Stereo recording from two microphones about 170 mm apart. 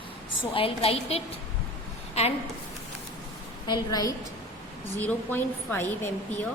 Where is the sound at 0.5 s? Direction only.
35° left (ahead or behind).